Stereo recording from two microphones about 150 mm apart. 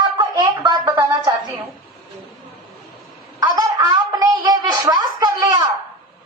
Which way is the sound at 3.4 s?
30° right (ahead or behind).